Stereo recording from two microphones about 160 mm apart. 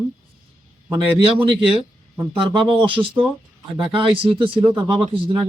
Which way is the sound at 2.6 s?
30° right (ahead or behind).